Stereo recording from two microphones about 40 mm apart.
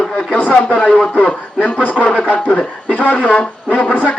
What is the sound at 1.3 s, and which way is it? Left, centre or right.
Speech, left.